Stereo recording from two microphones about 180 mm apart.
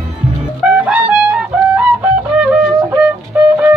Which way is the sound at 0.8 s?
5° right (ahead or behind).